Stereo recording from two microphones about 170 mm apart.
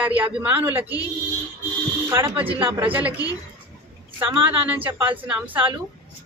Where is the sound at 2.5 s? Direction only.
30° right (ahead or behind).